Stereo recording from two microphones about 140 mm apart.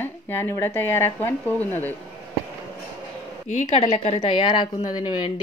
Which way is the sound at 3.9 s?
45° left (ahead or behind).